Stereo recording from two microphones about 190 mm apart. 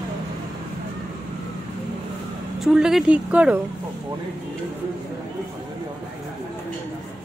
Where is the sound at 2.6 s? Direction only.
Centre (ahead or behind).